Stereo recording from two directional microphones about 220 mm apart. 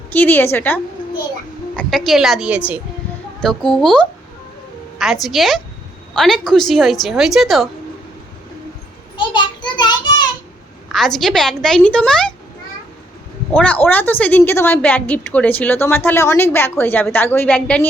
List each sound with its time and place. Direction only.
0.1 s a woman's voice: 10° left (ahead or behind)
9.1 s a sound: 20° left (ahead or behind)
10.8 s a woman's voice: centre (ahead or behind)
13.5 s a woman's voice: 5° left (ahead or behind)